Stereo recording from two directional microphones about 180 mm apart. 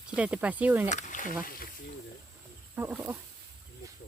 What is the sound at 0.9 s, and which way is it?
Speech, 45° left (ahead or behind).